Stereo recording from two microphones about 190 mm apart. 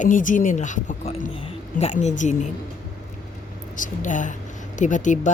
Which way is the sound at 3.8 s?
40° left (ahead or behind).